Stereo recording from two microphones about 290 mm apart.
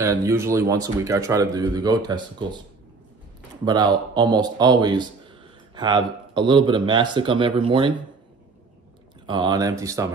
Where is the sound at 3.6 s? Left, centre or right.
Centre.